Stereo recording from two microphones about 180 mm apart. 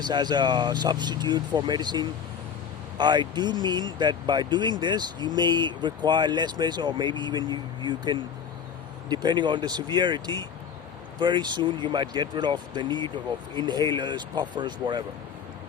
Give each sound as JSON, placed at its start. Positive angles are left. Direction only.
{"t": 0.0, "sound": "speech", "side_deg": -25}